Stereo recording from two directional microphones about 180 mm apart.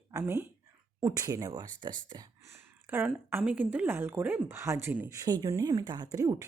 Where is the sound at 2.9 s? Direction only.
10° right (ahead or behind).